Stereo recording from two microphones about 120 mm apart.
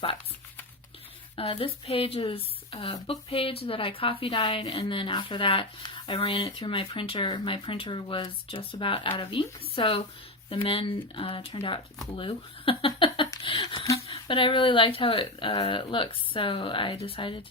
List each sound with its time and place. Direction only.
1.4 s a woman's voice: 50° left (ahead or behind)
13.4 s a sound: 45° left (ahead or behind)
14.1 s a woman's voice: 45° left (ahead or behind)